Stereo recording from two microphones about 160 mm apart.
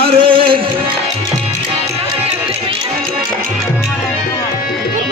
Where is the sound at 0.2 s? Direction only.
35° right (ahead or behind).